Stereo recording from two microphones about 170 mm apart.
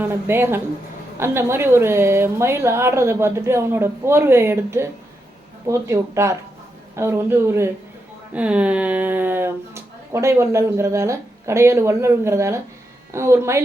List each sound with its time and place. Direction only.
0.0 s speech: 15° right (ahead or behind)